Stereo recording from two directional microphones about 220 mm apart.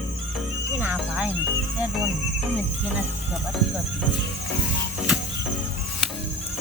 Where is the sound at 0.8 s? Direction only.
5° right (ahead or behind).